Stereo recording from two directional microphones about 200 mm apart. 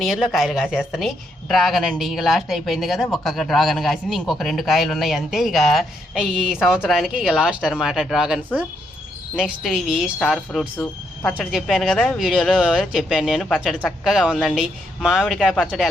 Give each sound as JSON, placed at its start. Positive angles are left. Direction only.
{"t": 0.0, "sound": "a woman's voice", "side_deg": 0}